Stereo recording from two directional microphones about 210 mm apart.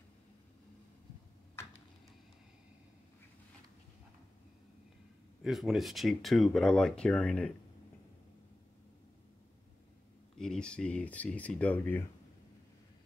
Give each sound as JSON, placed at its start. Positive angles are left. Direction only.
{"t": 5.4, "sound": "speech", "side_deg": 0}
{"t": 10.3, "sound": "speech", "side_deg": 5}